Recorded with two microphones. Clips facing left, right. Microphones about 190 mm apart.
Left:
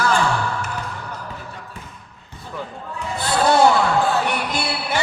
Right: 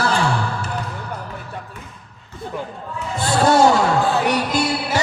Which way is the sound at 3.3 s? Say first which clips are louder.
Right 1 dB; 45° right (ahead or behind).